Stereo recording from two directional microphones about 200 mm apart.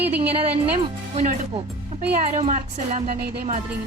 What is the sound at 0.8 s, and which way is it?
A woman's voice, 35° right (ahead or behind).